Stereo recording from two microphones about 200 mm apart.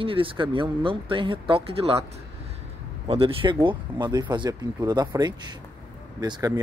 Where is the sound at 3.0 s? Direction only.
25° right (ahead or behind).